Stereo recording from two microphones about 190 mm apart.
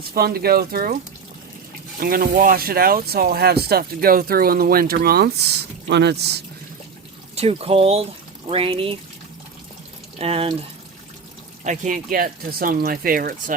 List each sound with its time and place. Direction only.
0.1 s speech: 55° right (ahead or behind)
2.0 s speech: 50° right (ahead or behind)
7.3 s speech: 30° right (ahead or behind)
10.2 s speech: 30° right (ahead or behind)
11.6 s speech: 40° right (ahead or behind)